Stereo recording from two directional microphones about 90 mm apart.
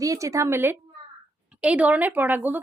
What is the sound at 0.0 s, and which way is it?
Speech, 40° right (ahead or behind).